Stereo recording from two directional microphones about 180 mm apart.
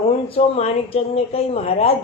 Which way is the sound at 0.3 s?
35° left (ahead or behind).